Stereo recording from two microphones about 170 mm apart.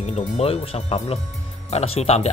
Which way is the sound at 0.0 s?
40° left (ahead or behind).